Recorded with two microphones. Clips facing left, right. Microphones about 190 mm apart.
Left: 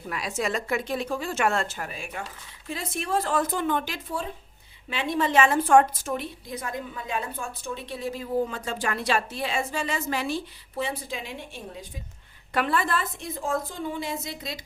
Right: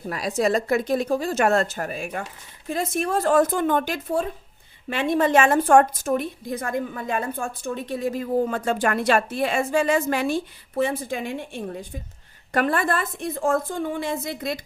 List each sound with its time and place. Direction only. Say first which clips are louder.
0.1 s a woman's voice: right 7 dB; 40° right (ahead or behind); by 14.6 s 55° right (ahead or behind)